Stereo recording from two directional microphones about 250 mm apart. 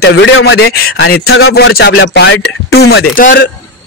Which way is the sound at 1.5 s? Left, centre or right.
Left.